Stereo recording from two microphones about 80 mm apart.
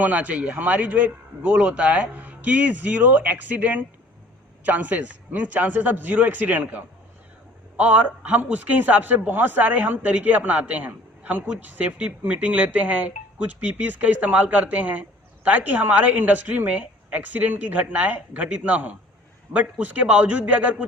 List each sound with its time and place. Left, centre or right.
0.0 s a man's voice: centre